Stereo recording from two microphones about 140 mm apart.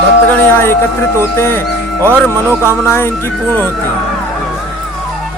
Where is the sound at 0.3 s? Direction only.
15° left (ahead or behind).